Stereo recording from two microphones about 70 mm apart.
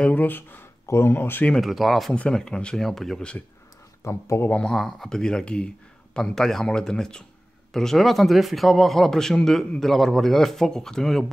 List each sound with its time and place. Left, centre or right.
0.1 s speech: left
1.5 s speech: centre
2.1 s speech: centre
4.0 s speech: left
4.5 s speech: centre